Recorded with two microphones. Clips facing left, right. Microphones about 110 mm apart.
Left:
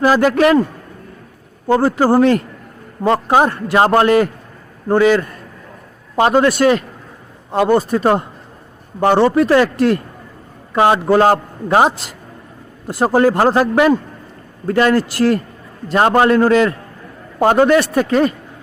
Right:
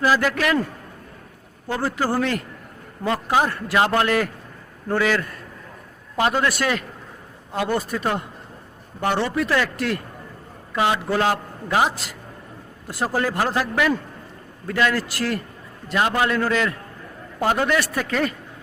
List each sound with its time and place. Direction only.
0.2 s a man's voice: 30° left (ahead or behind)
1.6 s a man's voice: 35° left (ahead or behind)
3.8 s a man's voice: 35° left (ahead or behind)
4.9 s a man's voice: 25° left (ahead or behind); by 11.9 s 40° left (ahead or behind)
13.1 s a man's voice: 35° left (ahead or behind)
15.9 s a man's voice: 45° left (ahead or behind); by 18.3 s 25° left (ahead or behind)